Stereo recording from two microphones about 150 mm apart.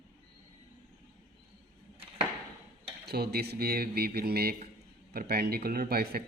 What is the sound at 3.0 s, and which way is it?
Speech, 90° right.